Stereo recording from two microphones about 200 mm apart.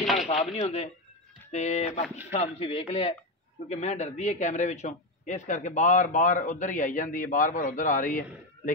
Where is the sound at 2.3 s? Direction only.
30° left (ahead or behind).